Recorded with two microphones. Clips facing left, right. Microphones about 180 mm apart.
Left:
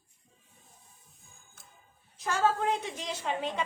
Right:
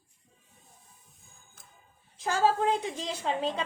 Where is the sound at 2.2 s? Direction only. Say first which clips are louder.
Right 2 dB; 30° right (ahead or behind).